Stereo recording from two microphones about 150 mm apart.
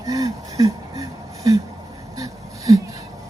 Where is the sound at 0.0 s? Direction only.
25° right (ahead or behind).